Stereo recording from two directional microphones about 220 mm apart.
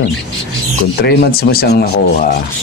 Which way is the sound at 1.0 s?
45° left (ahead or behind).